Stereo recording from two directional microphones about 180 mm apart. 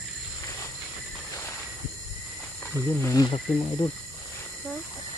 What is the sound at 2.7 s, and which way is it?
Speech, 15° left (ahead or behind).